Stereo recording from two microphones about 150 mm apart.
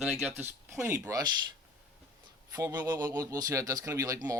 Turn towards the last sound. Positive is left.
turn(degrees=-20)  # may be behind; listen again after turning